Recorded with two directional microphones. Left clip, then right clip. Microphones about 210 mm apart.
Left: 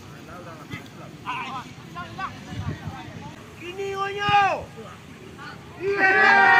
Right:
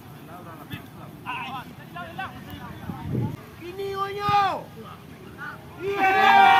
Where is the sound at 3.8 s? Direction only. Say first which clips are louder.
Left 1 dB; 55° right (ahead or behind).